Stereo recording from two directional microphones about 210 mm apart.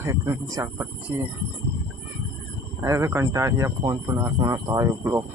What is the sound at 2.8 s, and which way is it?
Speech, 10° right (ahead or behind).